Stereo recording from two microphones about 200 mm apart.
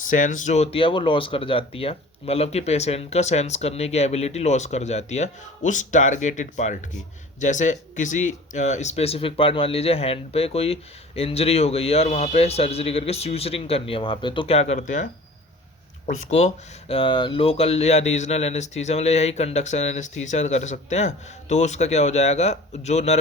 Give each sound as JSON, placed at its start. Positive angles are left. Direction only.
{"t": 0.1, "sound": "speech", "side_deg": 40}
{"t": 16.9, "sound": "speech", "side_deg": 25}